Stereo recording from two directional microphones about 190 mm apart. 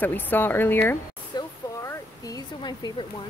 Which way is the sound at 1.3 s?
20° left (ahead or behind).